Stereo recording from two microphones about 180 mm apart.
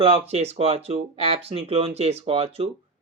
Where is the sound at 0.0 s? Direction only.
35° right (ahead or behind).